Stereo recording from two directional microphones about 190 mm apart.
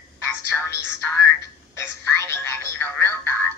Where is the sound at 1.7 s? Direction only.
15° left (ahead or behind).